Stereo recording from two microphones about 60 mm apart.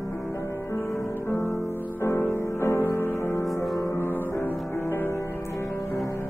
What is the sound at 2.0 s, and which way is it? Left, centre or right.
Music, left.